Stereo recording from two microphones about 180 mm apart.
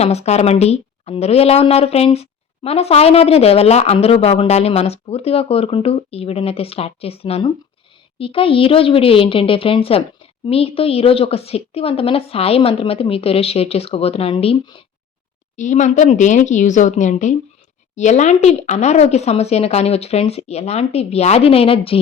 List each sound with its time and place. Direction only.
0.0 s a woman's voice: 35° left (ahead or behind)
15.5 s a woman's voice: 40° left (ahead or behind)